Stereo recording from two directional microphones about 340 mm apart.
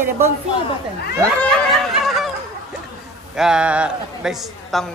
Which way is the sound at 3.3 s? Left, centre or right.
Centre.